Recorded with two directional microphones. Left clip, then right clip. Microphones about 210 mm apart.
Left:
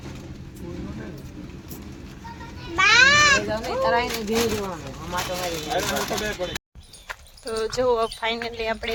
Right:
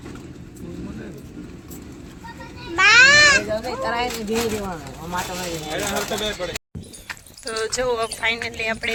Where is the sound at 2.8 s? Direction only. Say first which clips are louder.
Right 4 dB; 25° right (ahead or behind).